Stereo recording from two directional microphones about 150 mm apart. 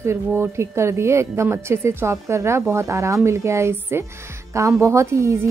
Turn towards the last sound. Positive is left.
turn(degrees=-20)  # may be behind; listen again after turning